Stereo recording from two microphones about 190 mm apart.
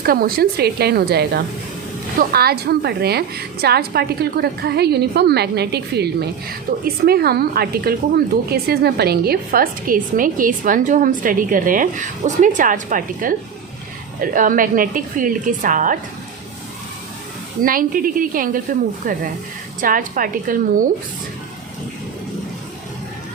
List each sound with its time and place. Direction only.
0.0 s a woman's voice: 50° right (ahead or behind)
17.6 s speech: 45° right (ahead or behind)